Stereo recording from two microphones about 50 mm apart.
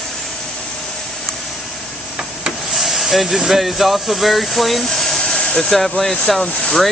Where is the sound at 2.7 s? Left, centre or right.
Centre.